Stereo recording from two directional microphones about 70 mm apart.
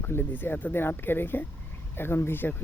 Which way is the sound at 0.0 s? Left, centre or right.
Left.